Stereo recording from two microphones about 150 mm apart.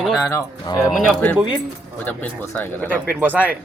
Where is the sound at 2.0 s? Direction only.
10° left (ahead or behind).